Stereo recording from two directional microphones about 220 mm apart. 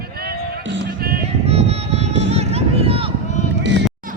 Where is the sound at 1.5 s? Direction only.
30° right (ahead or behind).